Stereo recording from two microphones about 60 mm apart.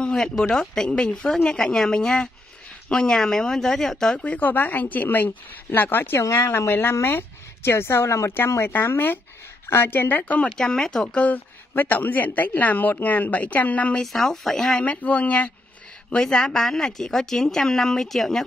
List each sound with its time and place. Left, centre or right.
0.0 s speech: centre
4.3 s a woman's voice: left
10.5 s speech: centre
11.1 s a woman's voice: left
13.9 s speech: centre
14.8 s a woman's voice: left
16.1 s speech: centre